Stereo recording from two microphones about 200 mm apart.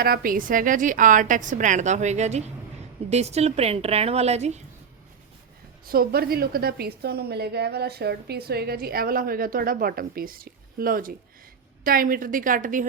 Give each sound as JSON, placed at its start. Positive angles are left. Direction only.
{"t": 0.0, "sound": "a woman's voice", "side_deg": -45}
{"t": 5.8, "sound": "a woman's voice", "side_deg": -50}